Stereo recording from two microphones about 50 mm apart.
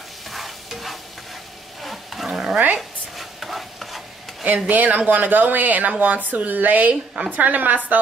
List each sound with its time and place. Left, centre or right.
0.3 s stir: centre
1.8 s wild animals: centre
2.8 s stir: centre
4.6 s speech: right